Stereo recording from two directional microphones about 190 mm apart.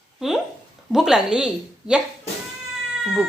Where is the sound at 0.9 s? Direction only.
Centre (ahead or behind).